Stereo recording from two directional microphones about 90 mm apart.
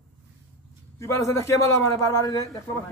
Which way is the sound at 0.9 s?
35° left (ahead or behind).